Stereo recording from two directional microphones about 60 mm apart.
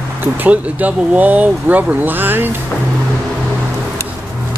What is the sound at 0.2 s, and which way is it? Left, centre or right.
Speech, right.